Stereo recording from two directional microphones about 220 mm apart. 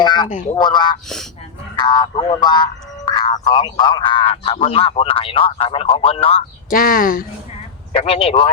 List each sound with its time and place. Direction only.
0.0 s honk: 20° left (ahead or behind)
0.5 s speech: 20° left (ahead or behind)
1.0 s speech: centre (ahead or behind)
1.8 s speech: 20° left (ahead or behind)
6.7 s speech: 40° left (ahead or behind)
7.9 s speech: 25° left (ahead or behind)